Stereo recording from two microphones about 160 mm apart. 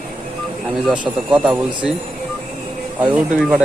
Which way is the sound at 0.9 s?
5° right (ahead or behind).